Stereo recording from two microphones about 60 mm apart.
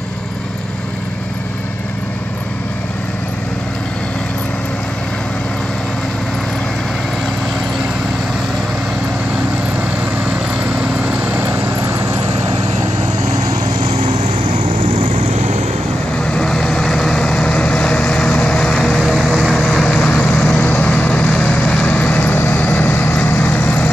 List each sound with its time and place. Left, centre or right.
10.6 s lawn mower: right
11.4 s vehicle: right
16.3 s vehicle: centre
18.8 s vehicle: centre
20.0 s vehicle: centre